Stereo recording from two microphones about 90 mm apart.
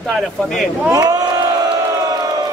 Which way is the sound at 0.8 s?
40° right (ahead or behind).